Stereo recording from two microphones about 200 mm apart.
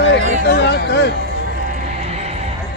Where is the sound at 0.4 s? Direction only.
60° left (ahead or behind).